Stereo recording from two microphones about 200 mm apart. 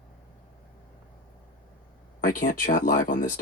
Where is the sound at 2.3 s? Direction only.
40° left (ahead or behind).